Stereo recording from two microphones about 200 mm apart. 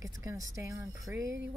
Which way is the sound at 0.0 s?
15° right (ahead or behind).